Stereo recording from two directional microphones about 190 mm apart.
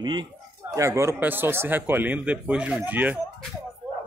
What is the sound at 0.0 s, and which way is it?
Speech, 25° right (ahead or behind).